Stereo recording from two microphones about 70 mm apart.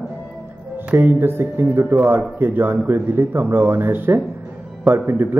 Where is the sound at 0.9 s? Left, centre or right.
Right.